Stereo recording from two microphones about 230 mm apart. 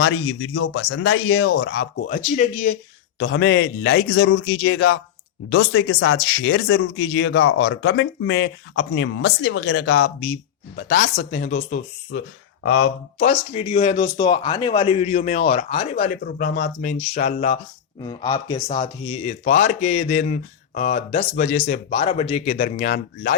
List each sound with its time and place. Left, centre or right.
0.0 s speech: left
1.6 s speech: left
3.2 s a man's voice: left
10.8 s a man's voice: left
13.3 s speech: left
16.0 s speech: left
18.0 s speech: left